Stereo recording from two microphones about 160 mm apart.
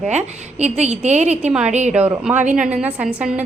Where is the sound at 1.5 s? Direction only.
5° right (ahead or behind).